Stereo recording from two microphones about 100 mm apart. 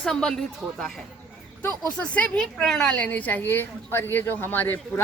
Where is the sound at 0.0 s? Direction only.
5° left (ahead or behind).